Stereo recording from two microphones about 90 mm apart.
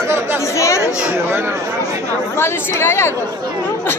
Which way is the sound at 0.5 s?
35° left (ahead or behind).